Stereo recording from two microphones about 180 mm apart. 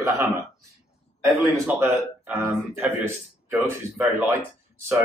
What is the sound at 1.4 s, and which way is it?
Speech, 15° right (ahead or behind).